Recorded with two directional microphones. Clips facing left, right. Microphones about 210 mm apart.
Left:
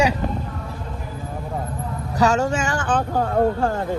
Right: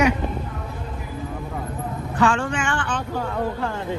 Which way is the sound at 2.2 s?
40° left (ahead or behind).